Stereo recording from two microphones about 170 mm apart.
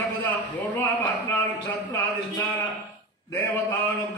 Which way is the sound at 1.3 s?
15° left (ahead or behind).